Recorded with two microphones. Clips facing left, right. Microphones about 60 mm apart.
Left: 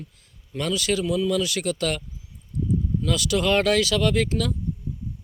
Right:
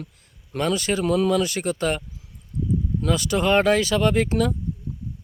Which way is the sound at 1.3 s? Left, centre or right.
Right.